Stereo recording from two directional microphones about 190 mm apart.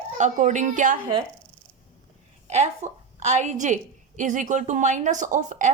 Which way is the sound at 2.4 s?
35° right (ahead or behind).